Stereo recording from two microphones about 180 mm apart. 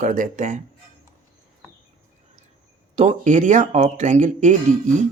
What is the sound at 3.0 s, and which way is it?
Speech, 40° right (ahead or behind).